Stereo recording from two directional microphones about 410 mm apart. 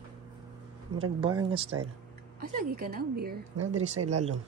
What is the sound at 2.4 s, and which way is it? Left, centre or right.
Speech, right.